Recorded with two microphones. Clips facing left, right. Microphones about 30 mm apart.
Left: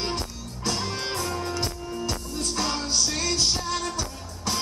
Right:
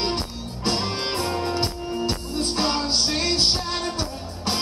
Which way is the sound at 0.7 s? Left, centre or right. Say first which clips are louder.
Right 4 dB; right.